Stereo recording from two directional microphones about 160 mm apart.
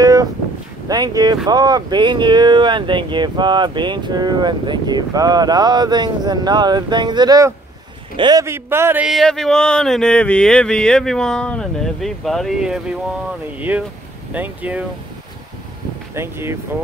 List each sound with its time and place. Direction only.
0.0 s a sound: 25° right (ahead or behind)
0.8 s a man's voice: 25° right (ahead or behind)
9.1 s a man's voice: 5° left (ahead or behind)
16.2 s a man's voice: 15° right (ahead or behind)